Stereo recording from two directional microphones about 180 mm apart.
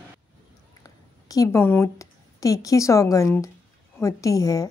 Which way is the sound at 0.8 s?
20° left (ahead or behind).